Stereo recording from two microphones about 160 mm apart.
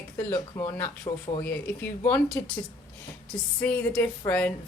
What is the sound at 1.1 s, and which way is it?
Speech, 30° left (ahead or behind).